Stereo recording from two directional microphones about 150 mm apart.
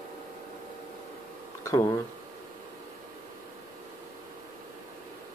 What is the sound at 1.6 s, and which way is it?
Speech, 20° left (ahead or behind).